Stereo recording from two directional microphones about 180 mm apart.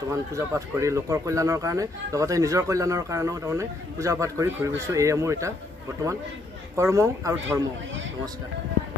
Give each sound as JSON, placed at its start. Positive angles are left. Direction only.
{"t": 0.1, "sound": "speech", "side_deg": -15}
{"t": 6.8, "sound": "speech", "side_deg": -15}